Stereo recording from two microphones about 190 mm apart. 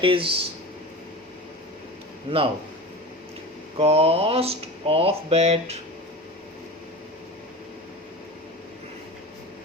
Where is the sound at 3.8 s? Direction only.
30° right (ahead or behind).